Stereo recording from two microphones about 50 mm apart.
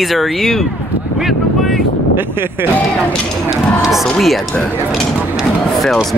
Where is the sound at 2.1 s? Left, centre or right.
Right.